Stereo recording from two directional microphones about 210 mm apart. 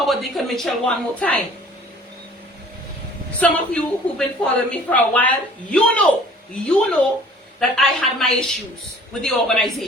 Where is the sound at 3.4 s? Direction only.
5° left (ahead or behind).